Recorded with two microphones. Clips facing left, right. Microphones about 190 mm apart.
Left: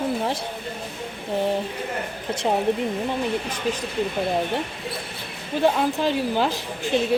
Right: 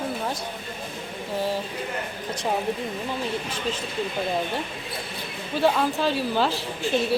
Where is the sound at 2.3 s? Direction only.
25° left (ahead or behind).